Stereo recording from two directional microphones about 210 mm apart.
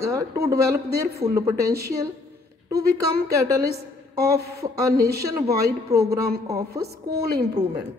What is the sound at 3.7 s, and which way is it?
Speech, 50° right (ahead or behind).